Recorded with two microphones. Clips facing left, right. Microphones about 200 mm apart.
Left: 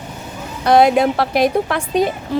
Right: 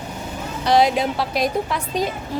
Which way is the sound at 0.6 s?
55° left (ahead or behind).